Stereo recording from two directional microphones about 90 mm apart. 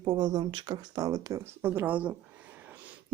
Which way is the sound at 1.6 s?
25° right (ahead or behind).